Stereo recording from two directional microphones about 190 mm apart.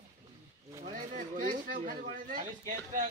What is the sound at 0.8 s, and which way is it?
Speech, 35° right (ahead or behind).